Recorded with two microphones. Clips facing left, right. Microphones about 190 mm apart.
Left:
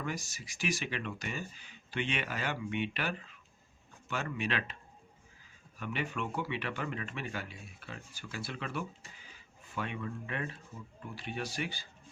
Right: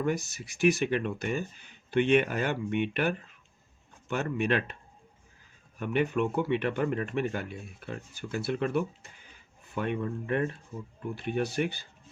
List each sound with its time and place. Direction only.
0.0 s speech: 60° right (ahead or behind)
5.8 s speech: 50° right (ahead or behind)